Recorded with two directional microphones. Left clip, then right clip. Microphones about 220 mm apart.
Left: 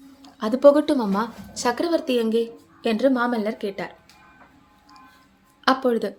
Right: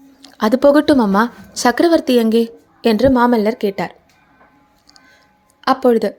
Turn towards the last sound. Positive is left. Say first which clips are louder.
# right 7 dB
turn(degrees=-30)  # may be behind; listen again after turning